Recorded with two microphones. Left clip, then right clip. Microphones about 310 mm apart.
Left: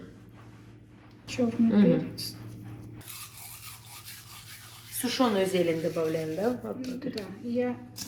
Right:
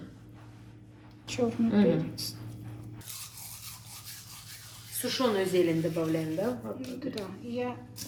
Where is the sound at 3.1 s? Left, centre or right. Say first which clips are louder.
Right 1 dB; centre.